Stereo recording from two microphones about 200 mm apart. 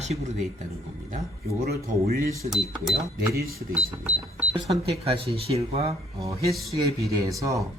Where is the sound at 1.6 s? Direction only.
50° right (ahead or behind).